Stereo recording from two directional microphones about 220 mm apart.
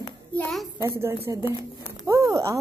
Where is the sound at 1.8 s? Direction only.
15° right (ahead or behind).